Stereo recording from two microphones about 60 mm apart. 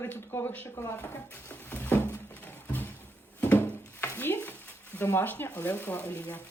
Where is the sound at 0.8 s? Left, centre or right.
Left.